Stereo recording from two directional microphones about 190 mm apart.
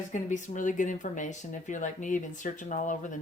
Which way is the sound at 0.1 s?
40° left (ahead or behind).